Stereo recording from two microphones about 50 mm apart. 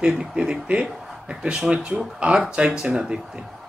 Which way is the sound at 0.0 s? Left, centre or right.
Centre.